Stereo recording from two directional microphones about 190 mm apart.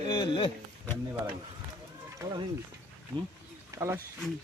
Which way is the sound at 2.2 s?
20° right (ahead or behind).